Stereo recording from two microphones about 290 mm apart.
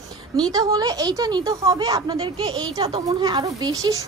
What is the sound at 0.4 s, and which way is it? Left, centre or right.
Speech, centre.